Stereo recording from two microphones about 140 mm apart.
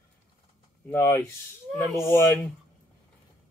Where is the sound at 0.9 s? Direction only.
20° left (ahead or behind).